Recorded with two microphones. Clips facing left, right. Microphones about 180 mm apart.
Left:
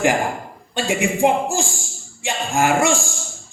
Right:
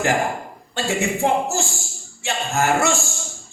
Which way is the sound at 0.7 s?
15° left (ahead or behind).